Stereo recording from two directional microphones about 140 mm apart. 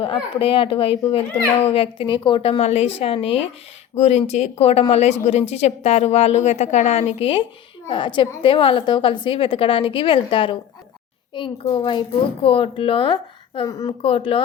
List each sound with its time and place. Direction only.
0.0 s a woman's voice: 35° left (ahead or behind)
11.6 s a woman's voice: 35° left (ahead or behind)
13.7 s speech: 25° left (ahead or behind)
14.0 s a woman's voice: 40° left (ahead or behind)